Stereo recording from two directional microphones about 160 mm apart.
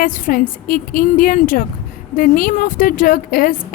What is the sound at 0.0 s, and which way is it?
A woman's voice, 60° left (ahead or behind).